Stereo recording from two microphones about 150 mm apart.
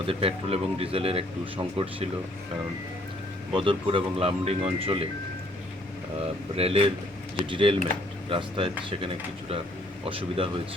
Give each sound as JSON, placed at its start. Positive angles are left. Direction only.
{"t": 0.0, "sound": "speech", "side_deg": -40}
{"t": 3.5, "sound": "speech", "side_deg": -35}
{"t": 6.6, "sound": "speech", "side_deg": -40}
{"t": 10.0, "sound": "speech", "side_deg": -40}